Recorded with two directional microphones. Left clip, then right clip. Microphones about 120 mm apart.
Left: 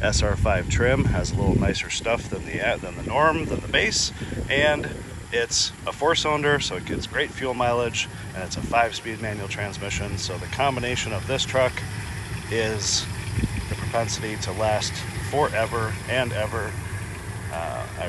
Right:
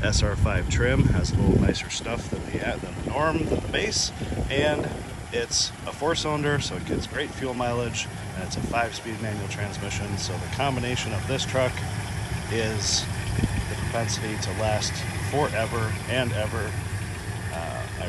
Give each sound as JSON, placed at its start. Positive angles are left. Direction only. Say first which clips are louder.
{"t": 0.0, "sound": "speech", "louder": "left 4 dB", "side_deg": -15}